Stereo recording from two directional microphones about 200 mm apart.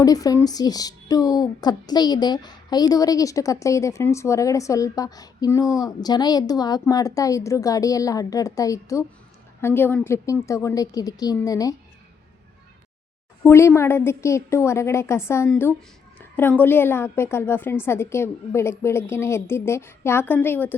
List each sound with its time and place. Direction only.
0.0 s speech: 20° left (ahead or behind)
13.4 s speech: 15° left (ahead or behind)